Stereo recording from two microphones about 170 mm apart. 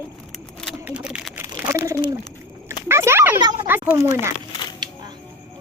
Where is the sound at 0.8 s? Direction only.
5° right (ahead or behind).